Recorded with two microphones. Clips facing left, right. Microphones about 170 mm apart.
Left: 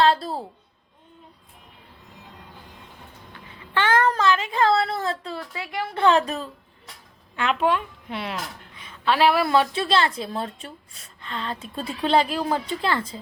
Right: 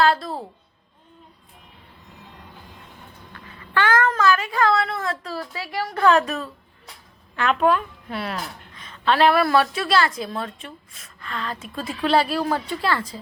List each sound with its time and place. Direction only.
0.0 s a sound: 30° left (ahead or behind)
3.3 s babbling: 20° left (ahead or behind)
4.2 s a woman's voice: 25° left (ahead or behind)
7.3 s a woman's voice: 20° left (ahead or behind)